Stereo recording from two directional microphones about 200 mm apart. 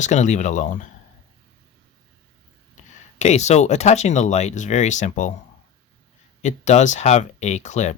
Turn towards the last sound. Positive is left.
turn(degrees=35)  # may be behind; listen again after turning